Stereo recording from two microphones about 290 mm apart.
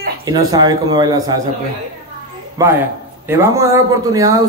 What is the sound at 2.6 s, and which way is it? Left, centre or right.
Speech, centre.